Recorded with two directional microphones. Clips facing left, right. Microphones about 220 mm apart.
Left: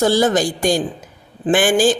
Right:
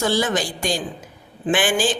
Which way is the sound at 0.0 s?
40° left (ahead or behind).